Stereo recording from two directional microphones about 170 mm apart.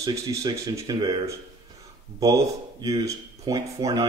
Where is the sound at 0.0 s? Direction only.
20° right (ahead or behind).